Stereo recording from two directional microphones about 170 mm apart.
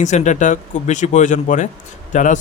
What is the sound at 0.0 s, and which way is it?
Speech, 45° left (ahead or behind).